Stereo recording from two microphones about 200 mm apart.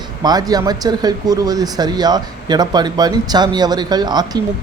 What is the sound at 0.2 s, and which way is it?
Speech, 20° right (ahead or behind).